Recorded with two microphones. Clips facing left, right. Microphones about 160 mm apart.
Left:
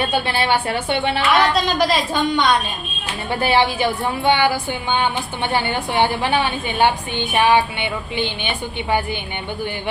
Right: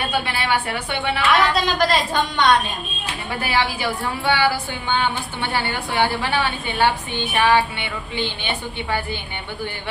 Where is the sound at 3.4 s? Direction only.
25° left (ahead or behind).